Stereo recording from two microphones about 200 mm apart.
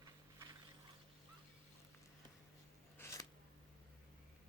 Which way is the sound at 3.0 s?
15° left (ahead or behind).